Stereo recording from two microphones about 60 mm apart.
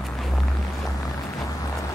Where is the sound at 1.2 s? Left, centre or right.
Left.